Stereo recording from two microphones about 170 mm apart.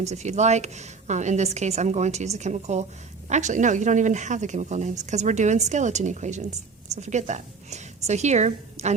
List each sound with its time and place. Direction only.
0.0 s a woman's voice: 40° right (ahead or behind)